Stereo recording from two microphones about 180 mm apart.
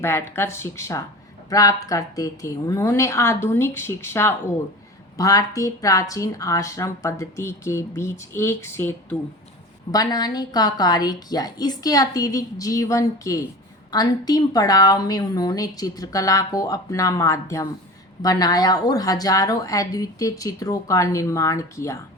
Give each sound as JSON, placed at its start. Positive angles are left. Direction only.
{"t": 0.0, "sound": "speech", "side_deg": 15}